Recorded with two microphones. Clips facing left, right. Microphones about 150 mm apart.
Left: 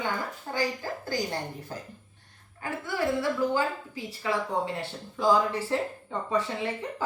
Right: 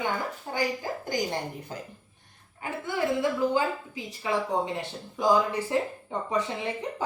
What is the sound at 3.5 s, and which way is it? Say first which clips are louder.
Speech: right 1 dB; 20° right (ahead or behind).